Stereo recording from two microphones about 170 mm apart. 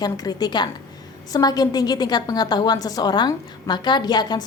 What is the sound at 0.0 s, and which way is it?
A woman's voice, 25° left (ahead or behind).